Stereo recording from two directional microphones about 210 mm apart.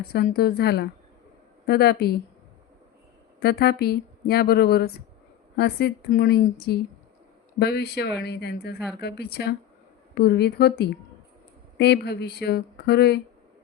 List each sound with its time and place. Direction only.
0.1 s a woman's voice: 45° left (ahead or behind)
3.4 s a woman's voice: 50° left (ahead or behind)
7.6 s a woman's voice: 50° left (ahead or behind)